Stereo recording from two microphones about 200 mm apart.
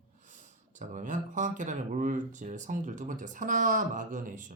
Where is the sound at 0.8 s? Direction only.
40° right (ahead or behind).